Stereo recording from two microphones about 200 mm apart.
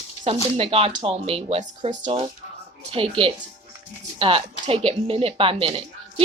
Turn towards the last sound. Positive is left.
turn(degrees=-30)  # may be behind; listen again after turning